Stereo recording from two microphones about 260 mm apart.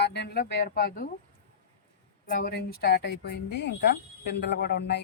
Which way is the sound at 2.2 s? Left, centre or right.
Left.